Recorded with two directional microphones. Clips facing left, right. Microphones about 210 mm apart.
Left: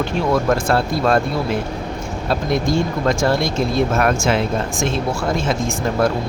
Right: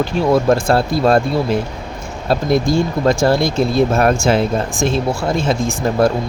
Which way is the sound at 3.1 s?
30° right (ahead or behind).